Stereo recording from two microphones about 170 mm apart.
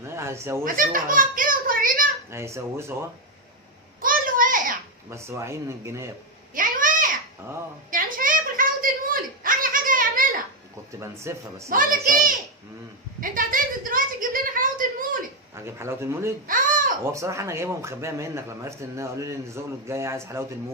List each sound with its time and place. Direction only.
0.0 s chuckle: 15° right (ahead or behind)
0.6 s a child's voice: 55° right (ahead or behind)
2.3 s a man's voice: 15° right (ahead or behind)
4.0 s a sound: 55° right (ahead or behind)
5.0 s a man's voice: 15° right (ahead or behind)
6.5 s a sound: 55° right (ahead or behind)
11.0 s a man's voice: 15° right (ahead or behind)
11.7 s a child's voice: 55° right (ahead or behind)
15.5 s a man's voice: 15° right (ahead or behind)
16.5 s a sound: 50° right (ahead or behind)
17.1 s a man's voice: 20° right (ahead or behind)